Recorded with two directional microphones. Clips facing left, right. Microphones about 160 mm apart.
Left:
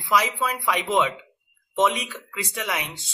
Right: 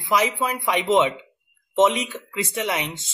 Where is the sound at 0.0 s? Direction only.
20° right (ahead or behind).